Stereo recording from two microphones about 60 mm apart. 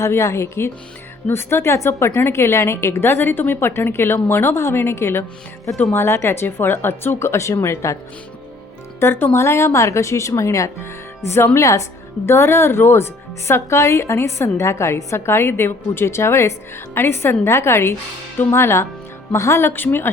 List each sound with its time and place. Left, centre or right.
0.0 s a woman's voice: left
9.0 s a woman's voice: left
11.5 s a woman's voice: left